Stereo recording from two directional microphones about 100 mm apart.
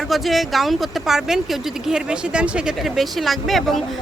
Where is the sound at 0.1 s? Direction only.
Centre (ahead or behind).